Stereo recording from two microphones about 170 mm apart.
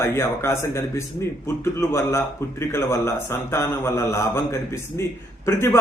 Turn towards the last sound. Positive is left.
turn(degrees=15)  # may be behind; listen again after turning